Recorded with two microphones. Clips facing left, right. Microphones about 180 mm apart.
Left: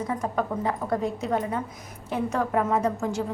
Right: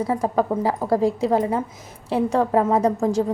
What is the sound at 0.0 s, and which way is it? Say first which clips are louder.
A woman's voice: right 6 dB; 30° right (ahead or behind).